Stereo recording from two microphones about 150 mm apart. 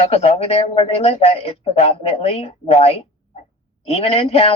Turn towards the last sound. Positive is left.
turn(degrees=40)  # may be behind; listen again after turning